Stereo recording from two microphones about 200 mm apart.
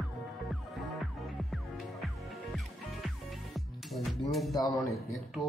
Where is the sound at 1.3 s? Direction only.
Centre (ahead or behind).